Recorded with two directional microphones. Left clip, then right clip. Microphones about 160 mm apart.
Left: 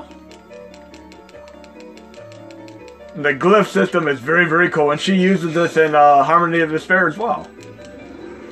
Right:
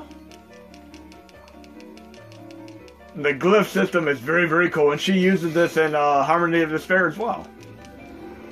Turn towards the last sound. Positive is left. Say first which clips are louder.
# left 4 dB
turn(degrees=50)  # may be behind; listen again after turning